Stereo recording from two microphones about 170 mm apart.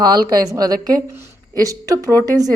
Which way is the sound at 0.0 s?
25° right (ahead or behind).